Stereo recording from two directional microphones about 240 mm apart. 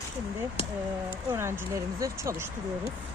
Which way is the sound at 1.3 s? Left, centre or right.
Centre.